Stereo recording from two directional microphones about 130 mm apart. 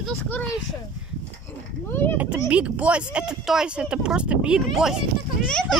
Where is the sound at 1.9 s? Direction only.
15° left (ahead or behind).